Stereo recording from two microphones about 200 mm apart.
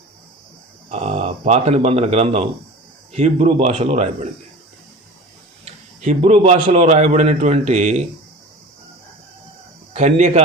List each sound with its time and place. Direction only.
0.9 s a man's voice: 35° right (ahead or behind)
5.6 s a man's voice: 35° right (ahead or behind)
9.9 s a man's voice: 35° right (ahead or behind)